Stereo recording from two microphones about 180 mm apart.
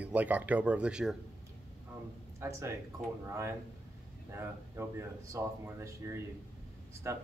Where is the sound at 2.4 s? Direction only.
15° right (ahead or behind).